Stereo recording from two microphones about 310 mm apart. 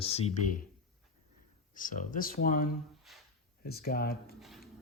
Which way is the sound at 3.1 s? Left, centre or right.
Centre.